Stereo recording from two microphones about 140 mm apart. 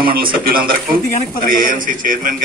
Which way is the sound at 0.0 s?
90° right.